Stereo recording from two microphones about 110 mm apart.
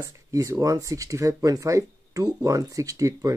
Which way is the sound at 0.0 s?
30° right (ahead or behind).